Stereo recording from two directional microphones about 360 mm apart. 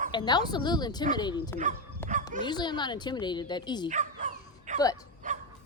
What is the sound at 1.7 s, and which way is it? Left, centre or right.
Speech, right.